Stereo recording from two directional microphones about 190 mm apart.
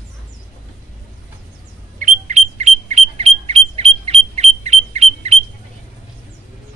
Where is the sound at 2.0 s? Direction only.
40° right (ahead or behind).